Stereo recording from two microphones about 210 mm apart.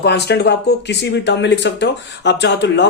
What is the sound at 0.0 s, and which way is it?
Speech, 55° left (ahead or behind).